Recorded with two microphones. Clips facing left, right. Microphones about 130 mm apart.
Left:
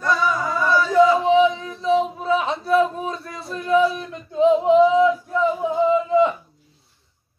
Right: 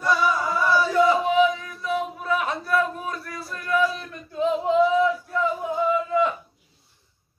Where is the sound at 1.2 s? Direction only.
25° left (ahead or behind).